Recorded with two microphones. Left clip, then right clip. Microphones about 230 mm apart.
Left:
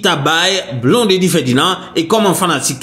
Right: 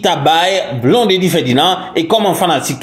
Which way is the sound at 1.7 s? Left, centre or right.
Centre.